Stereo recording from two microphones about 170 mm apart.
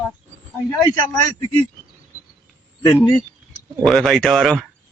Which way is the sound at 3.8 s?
Centre (ahead or behind).